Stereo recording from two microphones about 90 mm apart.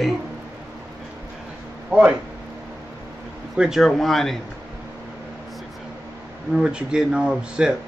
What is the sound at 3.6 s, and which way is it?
Speech, 5° right (ahead or behind).